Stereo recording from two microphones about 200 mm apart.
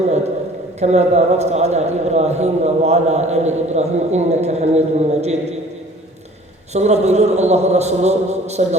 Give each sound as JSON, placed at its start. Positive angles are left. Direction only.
{"t": 0.8, "sound": "a man's voice", "side_deg": -35}
{"t": 6.7, "sound": "a man's voice", "side_deg": -35}